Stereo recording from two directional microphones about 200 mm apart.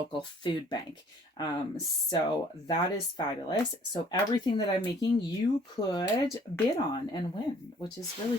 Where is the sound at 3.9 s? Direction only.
20° left (ahead or behind).